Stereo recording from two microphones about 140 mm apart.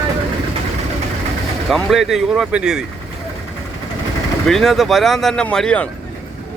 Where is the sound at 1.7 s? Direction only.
Centre (ahead or behind).